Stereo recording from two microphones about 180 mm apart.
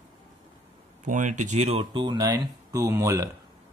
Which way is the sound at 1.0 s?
45° right (ahead or behind).